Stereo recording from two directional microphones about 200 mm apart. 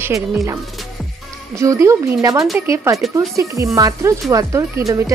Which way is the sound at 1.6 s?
15° right (ahead or behind).